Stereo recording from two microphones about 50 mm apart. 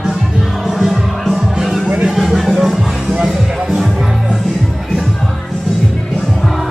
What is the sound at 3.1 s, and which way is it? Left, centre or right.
Music, right.